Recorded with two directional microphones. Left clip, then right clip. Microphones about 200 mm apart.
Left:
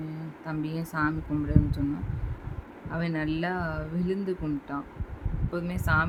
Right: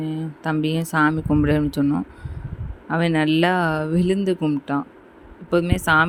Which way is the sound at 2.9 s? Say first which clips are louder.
Right 11 dB; 40° right (ahead or behind).